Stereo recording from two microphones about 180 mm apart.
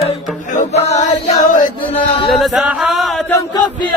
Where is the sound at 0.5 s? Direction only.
40° left (ahead or behind).